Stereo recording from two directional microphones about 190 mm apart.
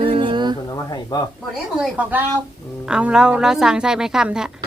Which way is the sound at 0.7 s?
20° left (ahead or behind).